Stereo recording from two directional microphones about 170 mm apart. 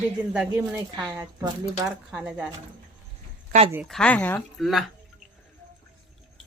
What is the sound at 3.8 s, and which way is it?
Speech, 5° left (ahead or behind).